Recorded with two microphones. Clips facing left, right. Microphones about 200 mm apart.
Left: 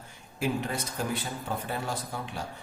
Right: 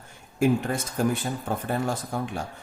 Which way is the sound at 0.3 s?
50° right (ahead or behind).